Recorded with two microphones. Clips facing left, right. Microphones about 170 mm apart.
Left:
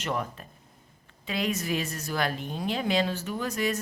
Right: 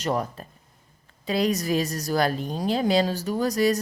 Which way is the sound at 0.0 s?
35° right (ahead or behind).